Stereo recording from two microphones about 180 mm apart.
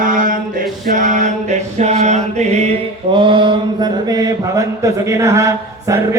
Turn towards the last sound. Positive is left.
turn(degrees=-15)  # may be behind; listen again after turning